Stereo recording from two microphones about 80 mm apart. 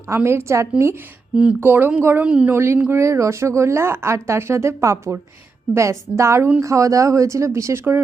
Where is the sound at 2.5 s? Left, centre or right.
Right.